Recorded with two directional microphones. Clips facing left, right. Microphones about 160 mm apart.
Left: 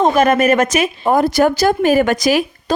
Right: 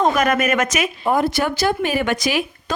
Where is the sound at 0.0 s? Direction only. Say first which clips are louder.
Left 5 dB; 30° left (ahead or behind).